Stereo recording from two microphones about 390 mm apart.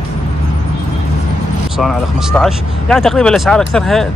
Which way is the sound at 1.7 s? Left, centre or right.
Centre.